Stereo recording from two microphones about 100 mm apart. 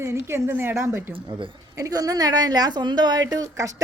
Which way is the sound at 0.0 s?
25° right (ahead or behind).